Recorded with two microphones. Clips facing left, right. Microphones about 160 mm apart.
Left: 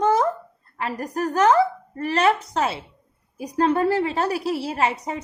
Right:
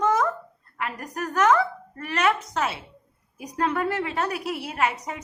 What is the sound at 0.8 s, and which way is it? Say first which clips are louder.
A woman's voice: left 5 dB; 30° left (ahead or behind).